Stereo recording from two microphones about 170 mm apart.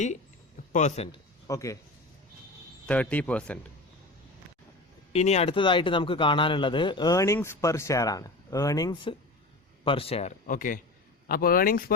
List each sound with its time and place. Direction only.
0.7 s speech: 45° left (ahead or behind)
1.5 s speech: 20° left (ahead or behind)
2.8 s speech: 10° left (ahead or behind)
5.1 s a man's voice: 40° left (ahead or behind)
10.4 s speech: 55° left (ahead or behind)